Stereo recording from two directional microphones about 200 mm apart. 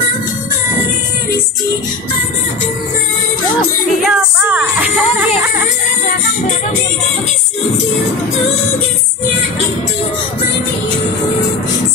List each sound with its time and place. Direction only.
4.0 s music: 10° right (ahead or behind)